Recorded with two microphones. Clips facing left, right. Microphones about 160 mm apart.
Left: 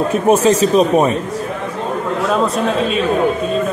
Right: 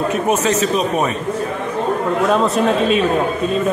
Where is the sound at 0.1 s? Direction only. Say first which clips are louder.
Left 5 dB; 35° left (ahead or behind).